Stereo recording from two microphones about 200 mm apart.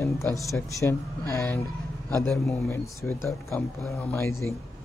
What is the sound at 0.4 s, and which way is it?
A man's voice, 15° left (ahead or behind).